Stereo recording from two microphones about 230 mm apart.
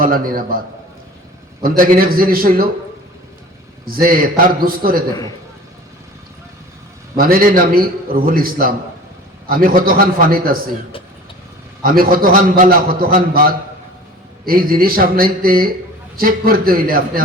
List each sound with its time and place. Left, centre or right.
0.0 s a man's voice: right
1.6 s a man's voice: right
3.8 s a man's voice: right
7.2 s a man's voice: right
11.8 s a man's voice: right